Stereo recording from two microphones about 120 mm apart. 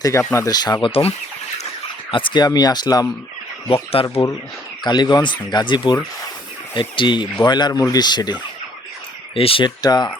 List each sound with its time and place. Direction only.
0.0 s speech: 25° left (ahead or behind)
4.0 s speech: 50° left (ahead or behind)
4.8 s speech: 35° left (ahead or behind)
9.3 s speech: 50° left (ahead or behind)
9.6 s speech: 35° left (ahead or behind)